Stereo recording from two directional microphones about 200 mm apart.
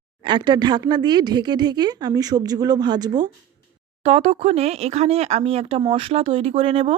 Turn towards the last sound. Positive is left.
turn(degrees=-30)  # may be behind; listen again after turning